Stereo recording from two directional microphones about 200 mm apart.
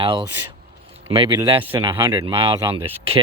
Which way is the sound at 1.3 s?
25° right (ahead or behind).